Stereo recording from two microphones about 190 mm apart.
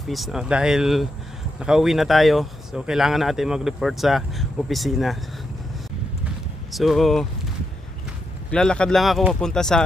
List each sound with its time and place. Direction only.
0.1 s speech: centre (ahead or behind)
6.7 s speech: centre (ahead or behind)
8.4 s speech: 5° left (ahead or behind)